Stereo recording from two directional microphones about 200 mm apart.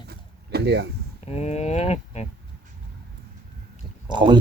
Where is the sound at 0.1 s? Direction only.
55° right (ahead or behind).